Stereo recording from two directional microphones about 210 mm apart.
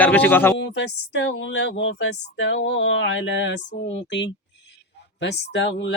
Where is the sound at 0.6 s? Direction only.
60° left (ahead or behind).